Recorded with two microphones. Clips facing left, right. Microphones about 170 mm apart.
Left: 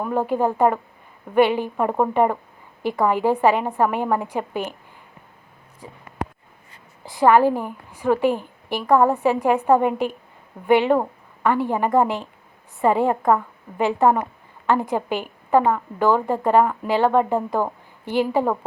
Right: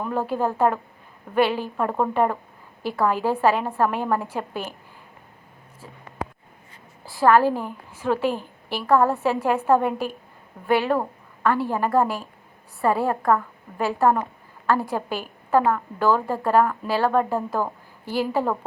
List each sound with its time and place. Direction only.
0.0 s a woman's voice: 15° left (ahead or behind)
5.8 s a woman's voice: 15° left (ahead or behind)
7.0 s a woman's voice: 20° left (ahead or behind)